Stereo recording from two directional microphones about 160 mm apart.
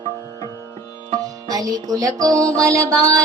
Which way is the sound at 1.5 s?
20° right (ahead or behind).